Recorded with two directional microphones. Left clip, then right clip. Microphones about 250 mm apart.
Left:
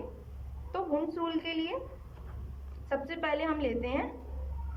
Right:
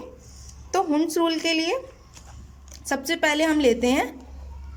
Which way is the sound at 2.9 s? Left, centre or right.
Right.